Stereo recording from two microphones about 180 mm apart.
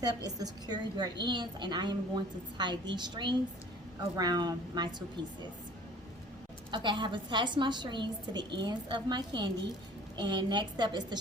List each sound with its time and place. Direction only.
0.0 s a woman's voice: 20° right (ahead or behind)
6.7 s a woman's voice: 25° right (ahead or behind)